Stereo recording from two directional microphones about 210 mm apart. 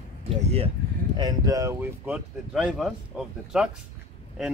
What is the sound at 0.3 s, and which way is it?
Speech, 30° right (ahead or behind).